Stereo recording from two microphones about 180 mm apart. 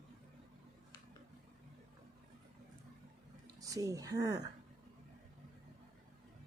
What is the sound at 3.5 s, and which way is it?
Speech, 20° right (ahead or behind).